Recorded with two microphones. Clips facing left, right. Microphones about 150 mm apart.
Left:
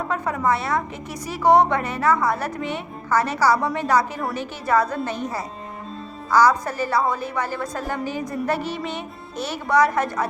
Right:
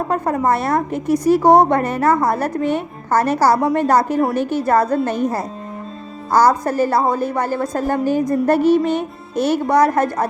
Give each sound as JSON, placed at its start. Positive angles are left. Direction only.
{"t": 0.1, "sound": "a woman's voice", "side_deg": -45}